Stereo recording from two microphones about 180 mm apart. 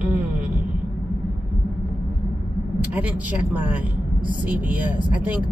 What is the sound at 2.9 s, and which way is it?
Speech, 10° right (ahead or behind).